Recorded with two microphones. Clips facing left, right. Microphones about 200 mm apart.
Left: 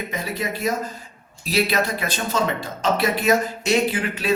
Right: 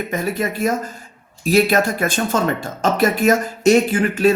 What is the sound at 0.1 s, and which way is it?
Speech, 50° right (ahead or behind).